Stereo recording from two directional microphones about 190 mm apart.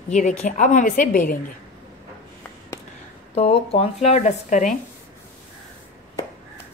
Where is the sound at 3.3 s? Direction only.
30° left (ahead or behind).